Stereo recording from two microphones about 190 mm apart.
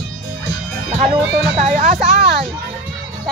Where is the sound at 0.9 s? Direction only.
35° right (ahead or behind).